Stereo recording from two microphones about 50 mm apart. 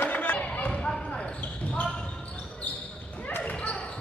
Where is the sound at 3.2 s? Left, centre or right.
Left.